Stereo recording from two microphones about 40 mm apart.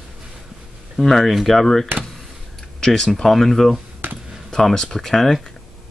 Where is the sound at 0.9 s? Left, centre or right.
Centre.